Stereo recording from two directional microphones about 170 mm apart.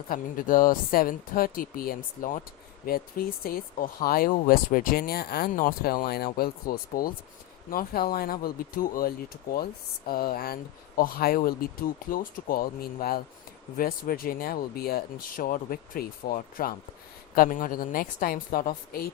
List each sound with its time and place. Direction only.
0.1 s speech: 55° left (ahead or behind)